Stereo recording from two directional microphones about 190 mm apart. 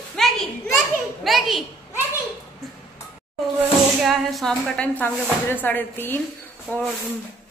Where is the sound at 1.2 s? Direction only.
Centre (ahead or behind).